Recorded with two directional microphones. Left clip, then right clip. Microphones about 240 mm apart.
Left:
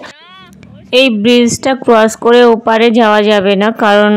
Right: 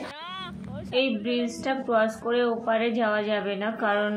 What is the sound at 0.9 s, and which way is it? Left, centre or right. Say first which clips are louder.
Speech: left 17 dB; left.